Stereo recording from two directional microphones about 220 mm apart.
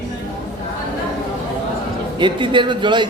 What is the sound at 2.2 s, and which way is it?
Speech, 20° right (ahead or behind).